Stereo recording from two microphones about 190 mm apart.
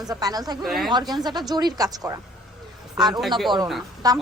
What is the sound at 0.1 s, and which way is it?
Speech, 20° right (ahead or behind).